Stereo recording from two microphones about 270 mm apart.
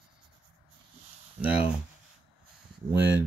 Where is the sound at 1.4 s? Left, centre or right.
Centre.